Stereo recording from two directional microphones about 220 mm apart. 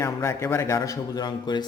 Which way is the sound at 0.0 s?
10° left (ahead or behind).